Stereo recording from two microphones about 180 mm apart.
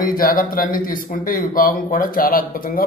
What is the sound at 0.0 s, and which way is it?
A man's voice, 55° left (ahead or behind).